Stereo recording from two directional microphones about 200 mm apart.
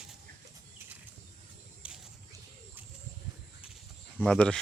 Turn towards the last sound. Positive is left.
turn(degrees=5)  # may be behind; listen again after turning